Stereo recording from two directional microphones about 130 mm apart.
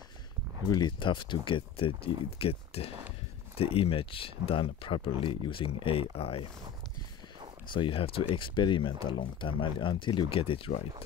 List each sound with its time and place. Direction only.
0.7 s speech: 35° left (ahead or behind)
7.7 s speech: 40° left (ahead or behind)